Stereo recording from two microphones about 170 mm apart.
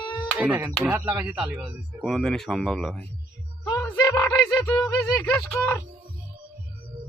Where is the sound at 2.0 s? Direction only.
5° left (ahead or behind).